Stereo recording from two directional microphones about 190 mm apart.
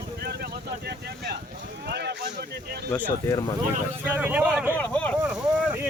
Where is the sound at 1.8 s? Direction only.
60° right (ahead or behind).